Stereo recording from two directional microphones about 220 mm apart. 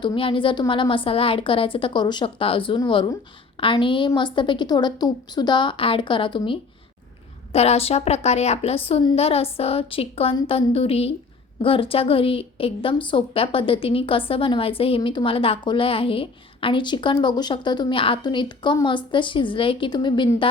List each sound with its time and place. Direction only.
0.0 s a woman's voice: 20° left (ahead or behind)